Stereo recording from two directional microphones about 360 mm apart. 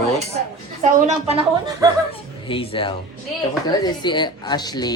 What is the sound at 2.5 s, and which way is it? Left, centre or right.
A woman's voice, centre.